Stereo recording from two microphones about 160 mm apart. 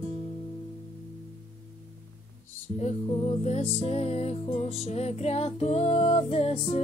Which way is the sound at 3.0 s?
35° left (ahead or behind).